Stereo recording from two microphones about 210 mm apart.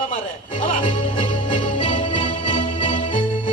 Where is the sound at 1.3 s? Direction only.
25° left (ahead or behind).